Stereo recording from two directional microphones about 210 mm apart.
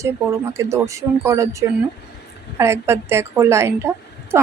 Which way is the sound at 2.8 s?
10° right (ahead or behind).